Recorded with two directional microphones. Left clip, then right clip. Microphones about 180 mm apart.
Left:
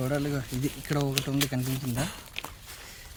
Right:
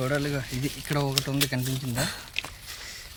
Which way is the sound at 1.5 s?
5° right (ahead or behind).